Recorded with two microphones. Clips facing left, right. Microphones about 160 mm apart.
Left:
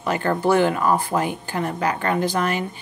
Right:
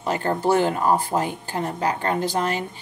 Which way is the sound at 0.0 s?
35° right (ahead or behind).